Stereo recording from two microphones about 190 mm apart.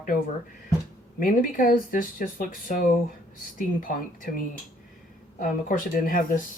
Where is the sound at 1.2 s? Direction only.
50° left (ahead or behind).